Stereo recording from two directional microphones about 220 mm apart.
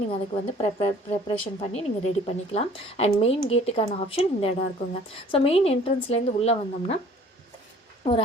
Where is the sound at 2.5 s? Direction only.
30° left (ahead or behind).